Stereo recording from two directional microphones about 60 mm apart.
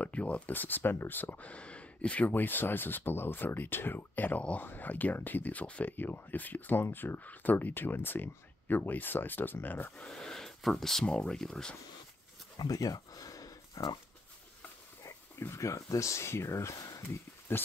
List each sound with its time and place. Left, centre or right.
0.0 s speech: left
9.9 s speech: centre
12.6 s a sound: left
15.0 s speech: left
17.5 s speech: left